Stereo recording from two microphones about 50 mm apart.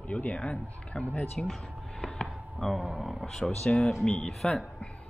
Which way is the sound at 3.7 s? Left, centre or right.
Centre.